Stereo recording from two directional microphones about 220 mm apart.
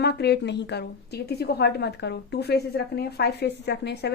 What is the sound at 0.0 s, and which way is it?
A woman's voice, 50° left (ahead or behind).